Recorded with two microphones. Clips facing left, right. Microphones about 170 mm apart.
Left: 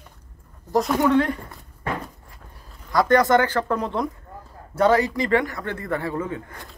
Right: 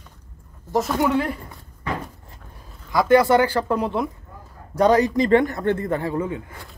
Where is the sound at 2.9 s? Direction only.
10° right (ahead or behind).